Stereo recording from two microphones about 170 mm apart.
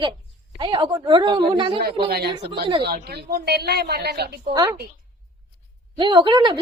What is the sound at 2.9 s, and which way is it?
A woman's voice, 80° right.